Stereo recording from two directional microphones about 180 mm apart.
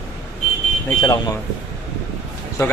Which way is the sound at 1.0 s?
20° left (ahead or behind).